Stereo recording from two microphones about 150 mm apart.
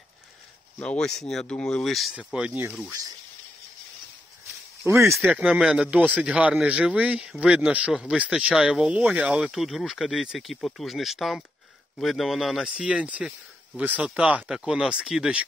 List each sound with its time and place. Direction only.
0.7 s a man's voice: 5° left (ahead or behind)
4.8 s a man's voice: 15° right (ahead or behind)